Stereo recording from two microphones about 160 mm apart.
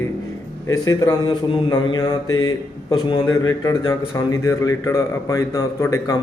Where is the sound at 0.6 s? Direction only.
20° left (ahead or behind).